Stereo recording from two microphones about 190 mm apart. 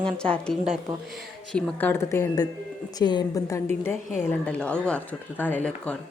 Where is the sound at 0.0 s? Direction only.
5° left (ahead or behind).